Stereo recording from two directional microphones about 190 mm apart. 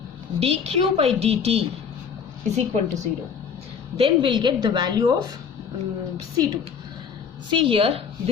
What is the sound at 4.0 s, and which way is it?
A woman's voice, 25° right (ahead or behind).